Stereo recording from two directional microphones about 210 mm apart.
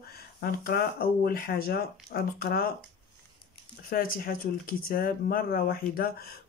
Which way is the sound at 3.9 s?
45° left (ahead or behind).